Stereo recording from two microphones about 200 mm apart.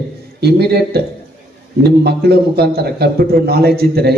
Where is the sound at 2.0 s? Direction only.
55° right (ahead or behind).